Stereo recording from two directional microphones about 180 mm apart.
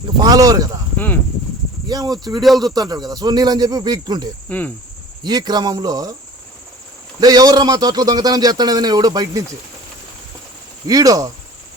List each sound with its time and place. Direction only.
0.2 s a man's voice: 20° right (ahead or behind)
0.9 s speech: 10° left (ahead or behind)
1.9 s a man's voice: 20° right (ahead or behind)
4.4 s cricket: 10° left (ahead or behind)
5.2 s a man's voice: 25° right (ahead or behind)
7.2 s a man's voice: 20° right (ahead or behind)
10.8 s a man's voice: 20° right (ahead or behind)